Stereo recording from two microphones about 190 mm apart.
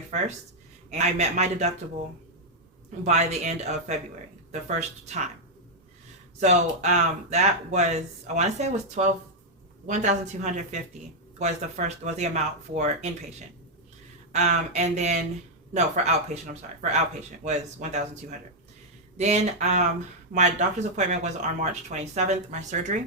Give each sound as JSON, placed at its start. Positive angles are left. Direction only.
{"t": 0.9, "sound": "speech", "side_deg": -35}
{"t": 3.0, "sound": "speech", "side_deg": -35}
{"t": 6.4, "sound": "speech", "side_deg": -35}
{"t": 14.3, "sound": "speech", "side_deg": -40}